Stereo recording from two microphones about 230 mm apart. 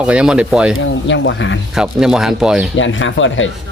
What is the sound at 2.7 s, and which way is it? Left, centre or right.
Speech, left.